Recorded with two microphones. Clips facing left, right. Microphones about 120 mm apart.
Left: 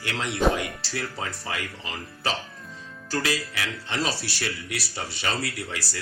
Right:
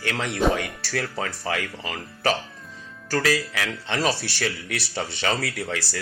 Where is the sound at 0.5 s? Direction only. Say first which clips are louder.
Even; 5° left (ahead or behind).